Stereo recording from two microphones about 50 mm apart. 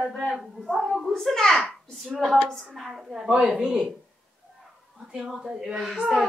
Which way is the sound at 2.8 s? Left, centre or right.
Centre.